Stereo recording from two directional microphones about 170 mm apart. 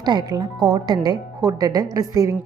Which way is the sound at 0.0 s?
25° right (ahead or behind).